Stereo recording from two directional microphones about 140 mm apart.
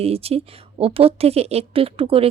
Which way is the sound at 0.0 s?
45° right (ahead or behind).